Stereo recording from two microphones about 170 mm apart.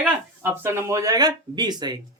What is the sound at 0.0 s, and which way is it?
Speech, 15° right (ahead or behind).